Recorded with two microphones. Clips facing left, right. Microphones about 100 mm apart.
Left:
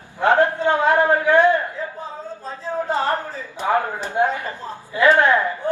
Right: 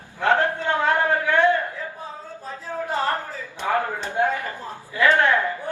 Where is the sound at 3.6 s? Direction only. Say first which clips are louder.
Left 3 dB; 35° left (ahead or behind).